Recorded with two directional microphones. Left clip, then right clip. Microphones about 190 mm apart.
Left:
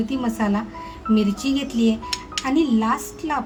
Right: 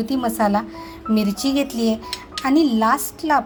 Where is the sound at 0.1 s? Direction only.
35° right (ahead or behind).